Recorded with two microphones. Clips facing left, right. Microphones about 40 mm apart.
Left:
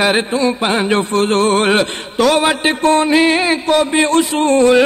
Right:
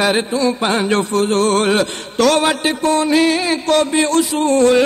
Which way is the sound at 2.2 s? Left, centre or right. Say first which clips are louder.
Left 1 dB; centre.